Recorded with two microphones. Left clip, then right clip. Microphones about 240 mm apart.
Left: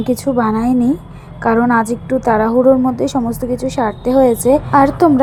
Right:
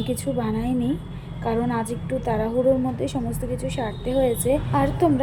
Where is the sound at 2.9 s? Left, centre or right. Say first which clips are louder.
Left 10 dB; left.